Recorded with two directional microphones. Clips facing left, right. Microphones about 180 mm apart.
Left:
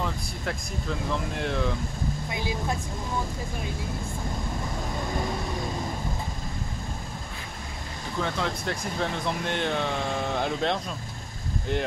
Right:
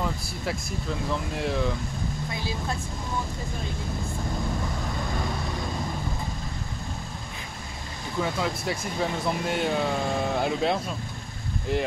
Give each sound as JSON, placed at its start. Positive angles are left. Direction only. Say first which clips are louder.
{"t": 0.0, "sound": "speech", "louder": "right 1 dB", "side_deg": -5}
{"t": 2.3, "sound": "speech", "louder": "left 3 dB", "side_deg": 15}
{"t": 8.2, "sound": "speech", "louder": "right 2 dB", "side_deg": -5}